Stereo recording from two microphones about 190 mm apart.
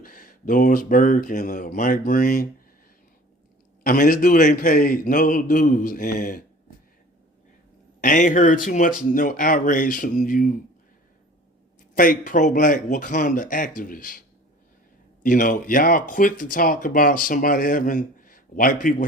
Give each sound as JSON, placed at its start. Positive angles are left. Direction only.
{"t": 0.0, "sound": "speech", "side_deg": 50}
{"t": 3.8, "sound": "speech", "side_deg": 45}
{"t": 8.0, "sound": "speech", "side_deg": 45}
{"t": 11.9, "sound": "speech", "side_deg": 45}